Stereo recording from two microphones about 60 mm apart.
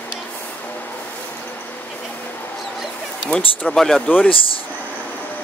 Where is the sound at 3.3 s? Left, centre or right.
Centre.